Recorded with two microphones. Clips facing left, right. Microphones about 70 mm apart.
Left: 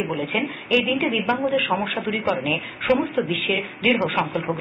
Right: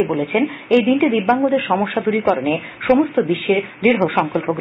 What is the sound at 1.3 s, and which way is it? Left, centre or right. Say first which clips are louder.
Speech: right 7 dB; centre.